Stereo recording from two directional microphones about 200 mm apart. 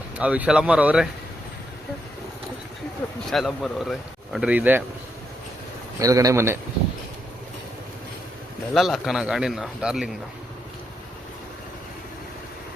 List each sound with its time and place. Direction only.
0.2 s speech: 5° right (ahead or behind)
3.2 s speech: centre (ahead or behind)
6.0 s a man's voice: 15° right (ahead or behind)
8.7 s speech: centre (ahead or behind)